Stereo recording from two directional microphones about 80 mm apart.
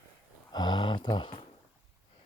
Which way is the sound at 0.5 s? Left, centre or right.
Left.